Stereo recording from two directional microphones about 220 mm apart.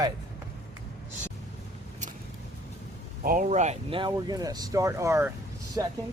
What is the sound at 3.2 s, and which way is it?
Speech, 35° right (ahead or behind).